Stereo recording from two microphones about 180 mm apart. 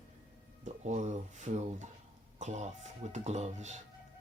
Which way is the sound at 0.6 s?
40° right (ahead or behind).